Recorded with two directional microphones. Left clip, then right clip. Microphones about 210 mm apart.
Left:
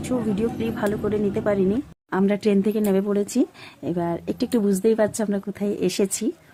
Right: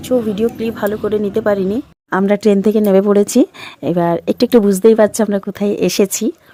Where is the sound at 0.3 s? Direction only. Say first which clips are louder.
Right 8 dB; 30° right (ahead or behind).